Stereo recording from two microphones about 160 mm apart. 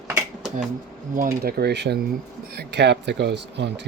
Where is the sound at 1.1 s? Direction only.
65° right (ahead or behind).